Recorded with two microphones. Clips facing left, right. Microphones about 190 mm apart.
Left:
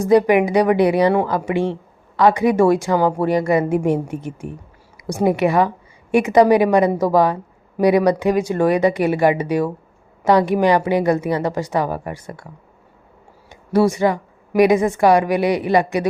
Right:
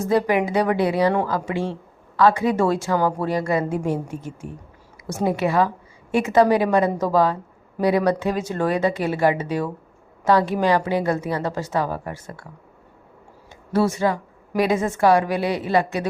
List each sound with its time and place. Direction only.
0.0 s a woman's voice: 15° left (ahead or behind)
4.3 s speech: 65° left (ahead or behind)
5.0 s a woman's voice: 15° left (ahead or behind)
13.5 s a woman's voice: 15° left (ahead or behind)